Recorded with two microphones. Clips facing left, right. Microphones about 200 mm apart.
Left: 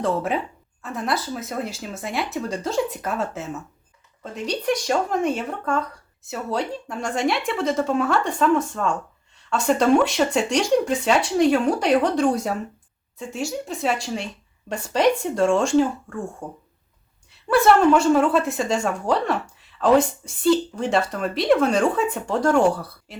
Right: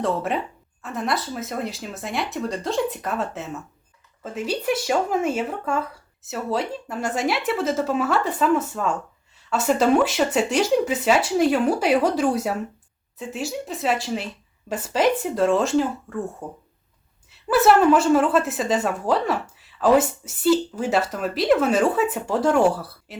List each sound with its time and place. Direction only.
0.0 s a woman's voice: centre (ahead or behind)